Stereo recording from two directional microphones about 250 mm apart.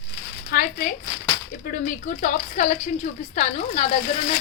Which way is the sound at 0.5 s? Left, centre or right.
Left.